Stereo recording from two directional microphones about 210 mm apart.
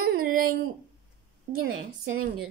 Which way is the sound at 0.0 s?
45° right (ahead or behind).